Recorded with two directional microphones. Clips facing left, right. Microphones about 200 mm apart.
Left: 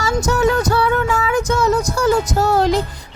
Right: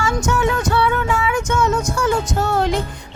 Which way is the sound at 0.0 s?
40° left (ahead or behind).